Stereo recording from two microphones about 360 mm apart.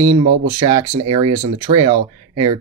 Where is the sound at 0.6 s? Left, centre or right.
Centre.